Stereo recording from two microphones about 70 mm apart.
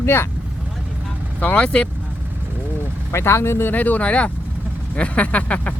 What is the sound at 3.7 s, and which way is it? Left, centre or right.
Speech, left.